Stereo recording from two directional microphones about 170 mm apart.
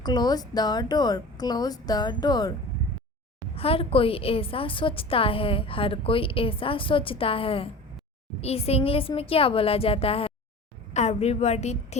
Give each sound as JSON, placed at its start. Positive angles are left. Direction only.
{"t": 0.0, "sound": "speech", "side_deg": 25}
{"t": 3.5, "sound": "a woman's voice", "side_deg": 35}